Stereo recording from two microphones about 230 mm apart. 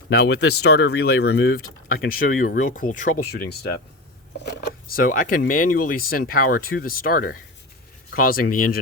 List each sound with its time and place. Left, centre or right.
0.1 s speech: left